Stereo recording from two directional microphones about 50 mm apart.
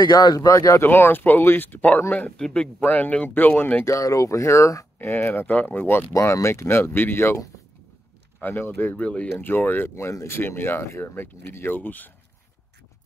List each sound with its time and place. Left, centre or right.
0.5 s speech: left
0.8 s speech: left
2.3 s speech: centre
2.8 s speech: left
3.8 s speech: left
4.9 s speech: left
6.1 s speech: left
8.4 s speech: left
9.0 s speech: left
9.4 s speech: left
9.8 s speech: left